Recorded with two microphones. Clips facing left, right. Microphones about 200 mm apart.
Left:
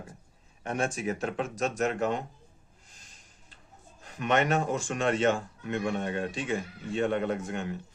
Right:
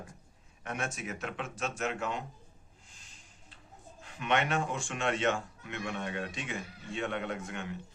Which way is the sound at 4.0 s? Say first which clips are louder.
Left 4 dB; 40° left (ahead or behind).